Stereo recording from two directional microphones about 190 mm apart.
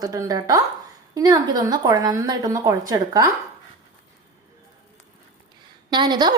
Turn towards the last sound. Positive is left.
turn(degrees=-25)  # may be behind; listen again after turning